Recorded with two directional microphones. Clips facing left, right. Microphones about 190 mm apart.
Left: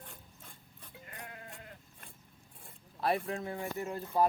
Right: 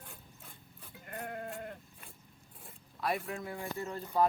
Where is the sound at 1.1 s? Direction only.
50° right (ahead or behind).